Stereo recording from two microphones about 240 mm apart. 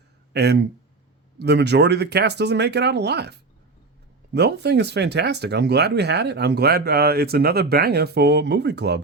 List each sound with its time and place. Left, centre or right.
0.3 s speech: right
4.4 s speech: right